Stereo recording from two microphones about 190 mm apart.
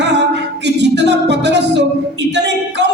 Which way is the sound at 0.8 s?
65° right (ahead or behind).